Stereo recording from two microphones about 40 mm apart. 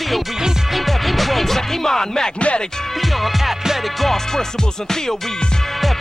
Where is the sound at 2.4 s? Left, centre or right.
Left.